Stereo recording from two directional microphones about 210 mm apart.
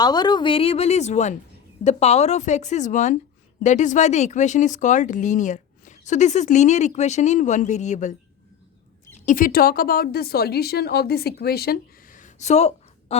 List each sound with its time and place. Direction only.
0.0 s a woman's voice: 20° left (ahead or behind); by 8.1 s 35° left (ahead or behind)
9.2 s a woman's voice: 40° left (ahead or behind)